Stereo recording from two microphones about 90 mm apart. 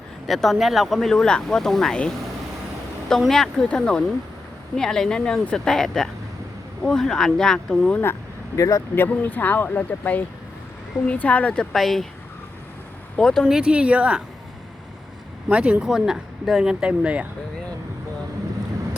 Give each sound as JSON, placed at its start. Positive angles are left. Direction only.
{"t": 0.3, "sound": "speech", "side_deg": 0}
{"t": 8.5, "sound": "speech", "side_deg": 35}
{"t": 9.0, "sound": "speech", "side_deg": 20}
{"t": 13.1, "sound": "speech", "side_deg": 5}
{"t": 13.4, "sound": "speech", "side_deg": -10}
{"t": 15.4, "sound": "speech", "side_deg": -15}